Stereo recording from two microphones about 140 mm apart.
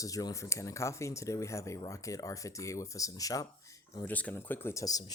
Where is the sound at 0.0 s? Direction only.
25° left (ahead or behind).